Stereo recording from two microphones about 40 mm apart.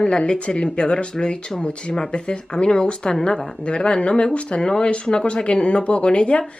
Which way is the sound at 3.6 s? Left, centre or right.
Left.